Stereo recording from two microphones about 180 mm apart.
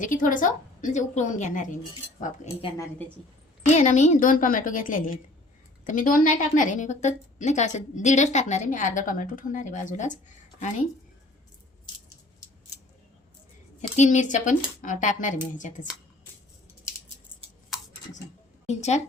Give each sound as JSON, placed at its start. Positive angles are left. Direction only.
{"t": 0.0, "sound": "a woman's voice", "side_deg": 45}
{"t": 3.7, "sound": "a woman's voice", "side_deg": 40}
{"t": 13.9, "sound": "a woman's voice", "side_deg": 40}
{"t": 18.7, "sound": "a woman's voice", "side_deg": 40}